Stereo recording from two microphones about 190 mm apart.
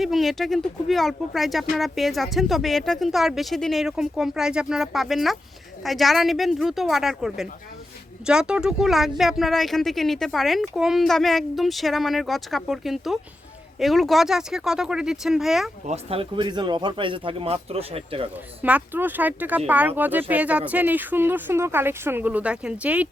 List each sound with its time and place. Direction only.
0.0 s speech: centre (ahead or behind)
15.9 s speech: 30° right (ahead or behind)
18.6 s speech: 10° right (ahead or behind)